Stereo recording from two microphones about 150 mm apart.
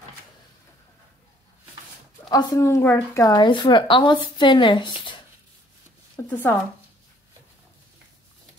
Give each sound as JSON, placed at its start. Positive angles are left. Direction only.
{"t": 2.2, "sound": "speech", "side_deg": 25}
{"t": 6.2, "sound": "speech", "side_deg": 10}